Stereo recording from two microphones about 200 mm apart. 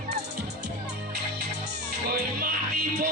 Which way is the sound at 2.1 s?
50° right (ahead or behind).